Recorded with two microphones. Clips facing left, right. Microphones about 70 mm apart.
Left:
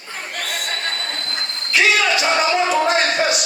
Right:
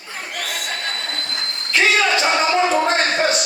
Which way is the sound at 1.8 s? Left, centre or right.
Right.